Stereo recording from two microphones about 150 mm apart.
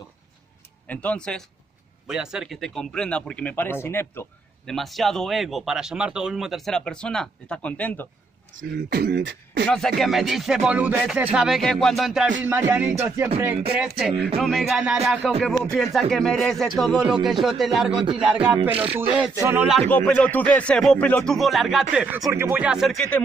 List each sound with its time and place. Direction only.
0.8 s a man's voice: 10° left (ahead or behind)
4.6 s speech: centre (ahead or behind)
8.7 s beatboxing: 90° right
9.7 s speech: centre (ahead or behind)
12.4 s speech: 15° right (ahead or behind)
19.9 s a man's voice: 10° left (ahead or behind)